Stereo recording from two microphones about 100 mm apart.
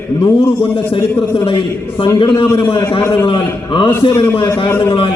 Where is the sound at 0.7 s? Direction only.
60° left (ahead or behind).